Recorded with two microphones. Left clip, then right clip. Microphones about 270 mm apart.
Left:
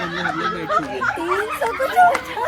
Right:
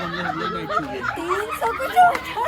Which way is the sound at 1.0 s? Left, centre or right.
Right.